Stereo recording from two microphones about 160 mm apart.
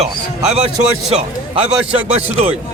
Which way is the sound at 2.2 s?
40° right (ahead or behind).